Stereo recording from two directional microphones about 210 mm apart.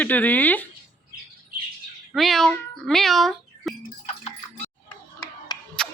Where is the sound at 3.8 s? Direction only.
30° left (ahead or behind).